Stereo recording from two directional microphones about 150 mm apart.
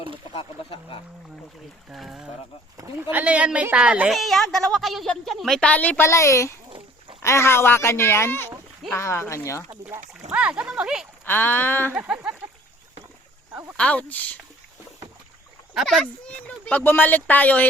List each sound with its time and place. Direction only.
0.3 s speech: 35° left (ahead or behind)
1.9 s speech: 5° right (ahead or behind)
6.1 s speech: 20° left (ahead or behind)
10.3 s speech: 5° right (ahead or behind)
11.3 s speech: 15° left (ahead or behind)
11.9 s speech: 5° right (ahead or behind)
13.5 s a sound: 15° right (ahead or behind)
13.7 s speech: 10° left (ahead or behind)
15.7 s speech: centre (ahead or behind)